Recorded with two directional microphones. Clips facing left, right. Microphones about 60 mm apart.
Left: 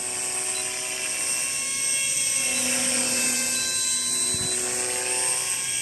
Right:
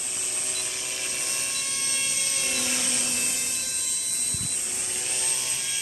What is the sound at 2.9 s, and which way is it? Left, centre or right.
Helicopter, left.